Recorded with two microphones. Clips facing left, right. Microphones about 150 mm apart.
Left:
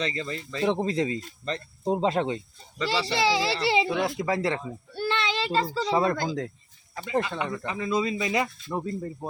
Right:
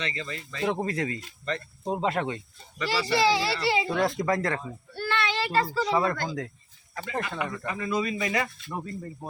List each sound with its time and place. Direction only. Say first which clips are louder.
0.0 s speech: left 4 dB; 35° left (ahead or behind)
4.0 s speech: right 1 dB; 5° left (ahead or behind)
4.9 s a child's voice: left 1 dB; 20° left (ahead or behind)